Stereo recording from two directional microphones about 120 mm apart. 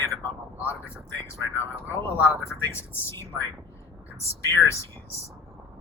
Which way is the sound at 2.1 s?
20° left (ahead or behind).